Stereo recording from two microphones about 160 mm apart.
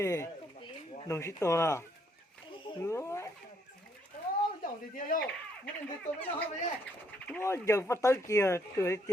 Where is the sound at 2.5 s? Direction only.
30° left (ahead or behind).